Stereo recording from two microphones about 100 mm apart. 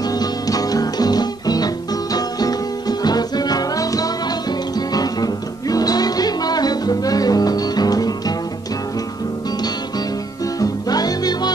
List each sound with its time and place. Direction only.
0.2 s music: 40° left (ahead or behind)
10.6 s music: 40° left (ahead or behind)